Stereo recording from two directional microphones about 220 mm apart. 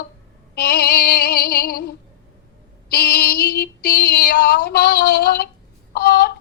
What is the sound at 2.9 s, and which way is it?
Female singing, 45° left (ahead or behind).